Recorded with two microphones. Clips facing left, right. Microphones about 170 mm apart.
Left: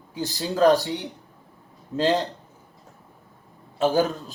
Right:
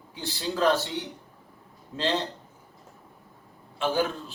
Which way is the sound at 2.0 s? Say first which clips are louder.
Left 6 dB; 40° left (ahead or behind).